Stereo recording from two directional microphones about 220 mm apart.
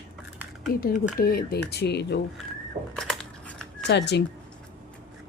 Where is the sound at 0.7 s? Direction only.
40° left (ahead or behind).